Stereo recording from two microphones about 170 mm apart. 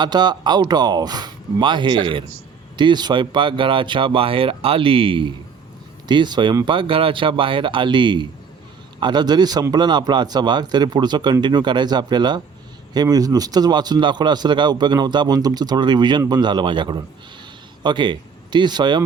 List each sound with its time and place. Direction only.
0.0 s a man's voice: 25° right (ahead or behind)